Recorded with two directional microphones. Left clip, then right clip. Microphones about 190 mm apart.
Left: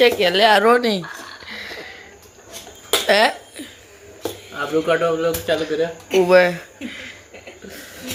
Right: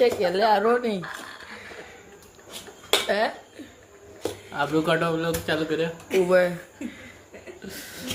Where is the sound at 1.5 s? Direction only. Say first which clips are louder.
Left 8 dB; 10° left (ahead or behind).